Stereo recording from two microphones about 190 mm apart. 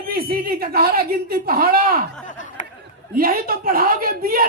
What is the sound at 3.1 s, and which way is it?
Speech, 50° right (ahead or behind).